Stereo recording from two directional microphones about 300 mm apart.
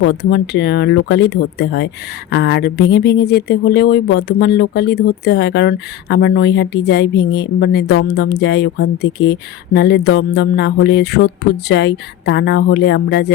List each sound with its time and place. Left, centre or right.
0.0 s speech: left